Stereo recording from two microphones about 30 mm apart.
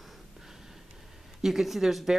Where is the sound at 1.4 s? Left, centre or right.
Centre.